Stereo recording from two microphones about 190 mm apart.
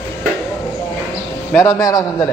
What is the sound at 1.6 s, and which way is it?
Speech, 15° left (ahead or behind).